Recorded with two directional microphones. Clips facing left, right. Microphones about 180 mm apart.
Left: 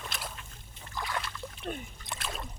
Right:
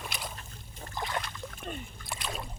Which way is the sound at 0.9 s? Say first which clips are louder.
Right 1 dB; 25° right (ahead or behind).